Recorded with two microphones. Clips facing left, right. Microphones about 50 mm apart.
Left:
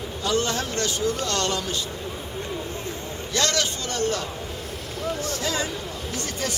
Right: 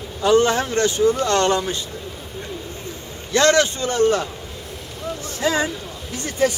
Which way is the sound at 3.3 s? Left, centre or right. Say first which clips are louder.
Right 9 dB; right.